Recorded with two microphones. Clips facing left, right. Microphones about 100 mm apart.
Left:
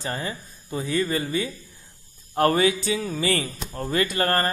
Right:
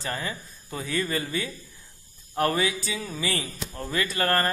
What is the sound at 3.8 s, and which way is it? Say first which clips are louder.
Speech: left 4 dB; 40° left (ahead or behind).